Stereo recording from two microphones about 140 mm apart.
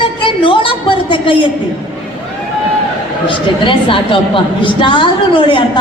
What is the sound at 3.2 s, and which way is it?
A woman's voice, 40° left (ahead or behind).